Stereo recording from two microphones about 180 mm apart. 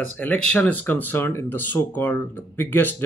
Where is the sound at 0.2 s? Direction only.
10° left (ahead or behind).